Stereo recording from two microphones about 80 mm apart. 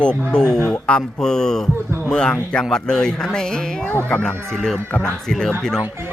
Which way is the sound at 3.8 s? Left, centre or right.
Left.